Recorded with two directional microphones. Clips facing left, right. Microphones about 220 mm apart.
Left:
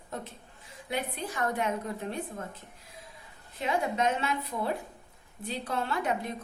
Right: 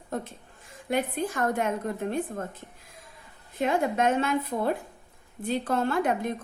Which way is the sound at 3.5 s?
50° right (ahead or behind).